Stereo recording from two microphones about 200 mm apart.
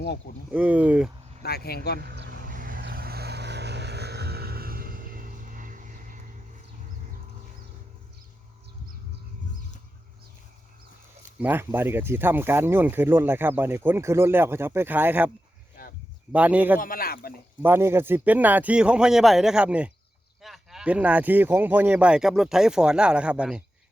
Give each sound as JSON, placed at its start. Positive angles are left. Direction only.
{"t": 0.5, "sound": "speech", "side_deg": -5}
{"t": 1.4, "sound": "speech", "side_deg": 50}
{"t": 2.0, "sound": "speech", "side_deg": -55}
{"t": 2.5, "sound": "vehicle", "side_deg": -45}
{"t": 11.3, "sound": "speech", "side_deg": -10}
{"t": 16.3, "sound": "speech", "side_deg": -5}
{"t": 16.7, "sound": "speech", "side_deg": 45}
{"t": 17.6, "sound": "speech", "side_deg": -10}